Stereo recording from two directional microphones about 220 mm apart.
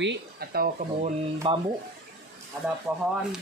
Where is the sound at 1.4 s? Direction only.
25° right (ahead or behind).